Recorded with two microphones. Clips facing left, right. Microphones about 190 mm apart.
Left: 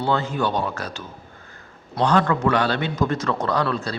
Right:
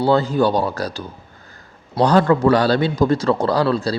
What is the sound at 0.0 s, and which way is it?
Speech, 35° right (ahead or behind).